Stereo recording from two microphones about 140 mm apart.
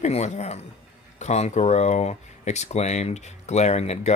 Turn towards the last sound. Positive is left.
turn(degrees=50)  # may be behind; listen again after turning